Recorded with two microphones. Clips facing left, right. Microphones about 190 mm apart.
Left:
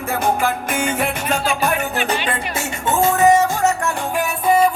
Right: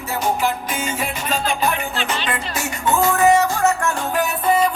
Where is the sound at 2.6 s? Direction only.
25° left (ahead or behind).